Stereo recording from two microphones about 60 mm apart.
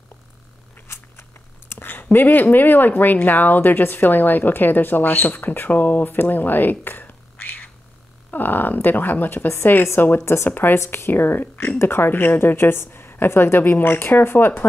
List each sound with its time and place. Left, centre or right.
0.8 s a sound: left
1.7 s speech: left
10.2 s speech: left